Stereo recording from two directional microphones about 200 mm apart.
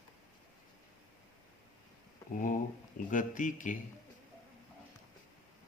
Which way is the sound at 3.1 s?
40° left (ahead or behind).